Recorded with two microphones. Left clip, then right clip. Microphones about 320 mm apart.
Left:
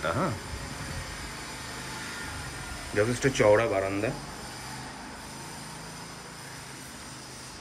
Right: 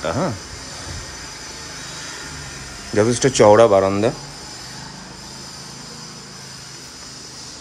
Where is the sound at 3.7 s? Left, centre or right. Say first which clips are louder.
Right 13 dB; right.